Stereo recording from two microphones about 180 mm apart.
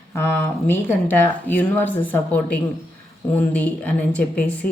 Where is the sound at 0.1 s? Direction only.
10° left (ahead or behind).